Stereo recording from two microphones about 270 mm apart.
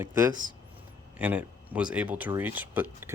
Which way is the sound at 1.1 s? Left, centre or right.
Centre.